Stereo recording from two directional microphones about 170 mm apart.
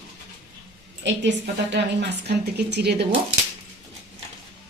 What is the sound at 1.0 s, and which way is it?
A woman's voice, 90° right.